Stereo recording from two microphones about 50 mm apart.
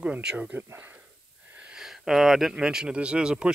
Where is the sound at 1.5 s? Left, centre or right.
Centre.